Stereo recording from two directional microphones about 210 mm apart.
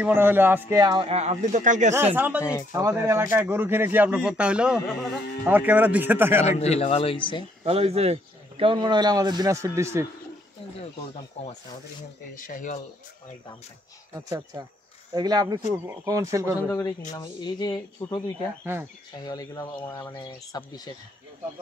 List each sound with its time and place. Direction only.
0.0 s a man's voice: 10° right (ahead or behind); by 2.0 s 35° right (ahead or behind)
2.1 s speech: 10° right (ahead or behind)
6.4 s speech: 30° left (ahead or behind)
7.6 s a man's voice: 30° right (ahead or behind); by 10.0 s 15° right (ahead or behind)
12.4 s speech: 40° left (ahead or behind)
14.1 s a man's voice: 15° right (ahead or behind)
17.1 s speech: 20° left (ahead or behind)
19.2 s speech: 15° left (ahead or behind)